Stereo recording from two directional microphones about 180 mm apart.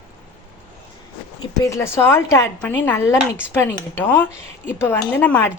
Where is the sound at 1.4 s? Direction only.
15° left (ahead or behind).